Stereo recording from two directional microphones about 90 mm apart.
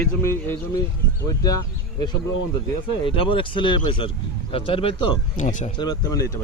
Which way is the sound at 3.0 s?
80° left.